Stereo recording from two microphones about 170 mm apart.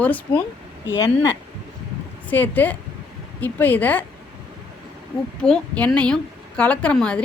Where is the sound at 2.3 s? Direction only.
10° left (ahead or behind).